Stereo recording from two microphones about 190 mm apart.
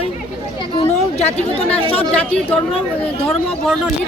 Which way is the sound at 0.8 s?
35° left (ahead or behind).